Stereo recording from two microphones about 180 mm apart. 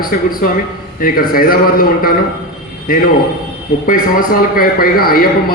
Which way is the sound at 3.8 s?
50° left (ahead or behind).